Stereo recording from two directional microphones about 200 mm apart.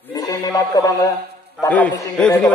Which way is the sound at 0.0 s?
15° left (ahead or behind).